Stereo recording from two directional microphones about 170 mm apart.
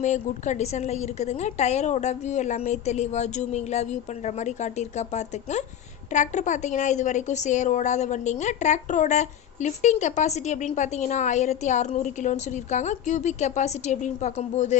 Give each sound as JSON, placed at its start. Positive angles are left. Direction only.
{"t": 0.0, "sound": "a woman's voice", "side_deg": 45}